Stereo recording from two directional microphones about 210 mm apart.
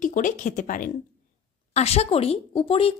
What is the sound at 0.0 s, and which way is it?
A woman's voice, 40° left (ahead or behind).